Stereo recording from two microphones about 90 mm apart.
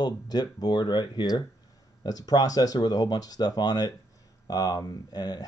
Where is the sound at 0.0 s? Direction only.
50° left (ahead or behind).